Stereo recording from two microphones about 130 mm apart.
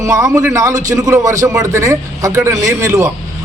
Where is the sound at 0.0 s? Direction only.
25° right (ahead or behind).